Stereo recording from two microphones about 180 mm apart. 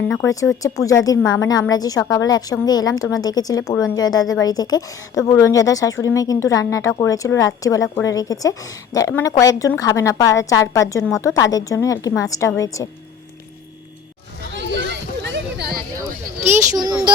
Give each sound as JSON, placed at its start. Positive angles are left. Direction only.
{"t": 0.1, "sound": "a woman's voice", "side_deg": 20}
{"t": 14.5, "sound": "a sound", "side_deg": -75}
{"t": 16.7, "sound": "speech", "side_deg": -20}